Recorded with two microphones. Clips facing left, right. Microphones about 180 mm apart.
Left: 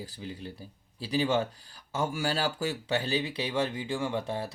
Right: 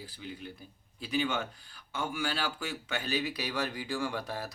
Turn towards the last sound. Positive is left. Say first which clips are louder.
# left 4 dB
turn(degrees=25)  # may be behind; listen again after turning